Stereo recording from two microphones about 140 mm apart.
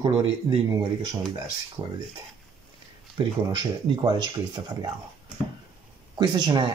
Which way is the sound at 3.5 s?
35° right (ahead or behind).